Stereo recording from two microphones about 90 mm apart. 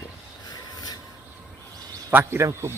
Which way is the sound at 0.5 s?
45° left (ahead or behind).